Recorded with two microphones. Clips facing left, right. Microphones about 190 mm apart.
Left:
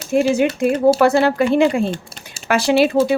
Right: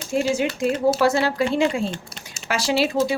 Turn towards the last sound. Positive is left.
turn(degrees=55)  # may be behind; listen again after turning